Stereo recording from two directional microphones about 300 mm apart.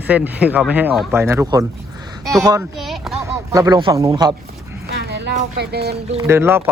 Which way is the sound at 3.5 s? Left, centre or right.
Centre.